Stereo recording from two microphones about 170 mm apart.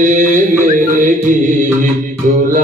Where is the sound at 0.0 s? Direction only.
50° right (ahead or behind).